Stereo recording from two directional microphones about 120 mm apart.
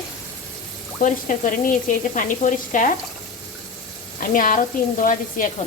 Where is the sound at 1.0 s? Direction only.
90° left.